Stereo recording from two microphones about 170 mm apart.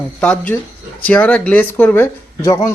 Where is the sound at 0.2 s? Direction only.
10° left (ahead or behind).